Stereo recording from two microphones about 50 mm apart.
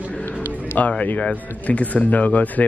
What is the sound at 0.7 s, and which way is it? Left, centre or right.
Speech, left.